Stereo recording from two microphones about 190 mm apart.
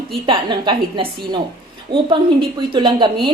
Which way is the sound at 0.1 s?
25° right (ahead or behind).